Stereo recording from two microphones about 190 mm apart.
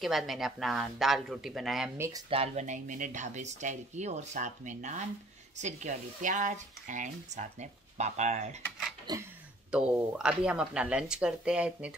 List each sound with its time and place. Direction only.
0.0 s speech: centre (ahead or behind)
2.0 s speech: 15° right (ahead or behind)
2.2 s speech: 30° right (ahead or behind)
9.1 s speech: 20° right (ahead or behind)
9.7 s speech: 5° right (ahead or behind)